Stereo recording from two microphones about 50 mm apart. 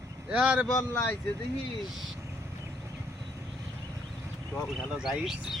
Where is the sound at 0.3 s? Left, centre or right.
Right.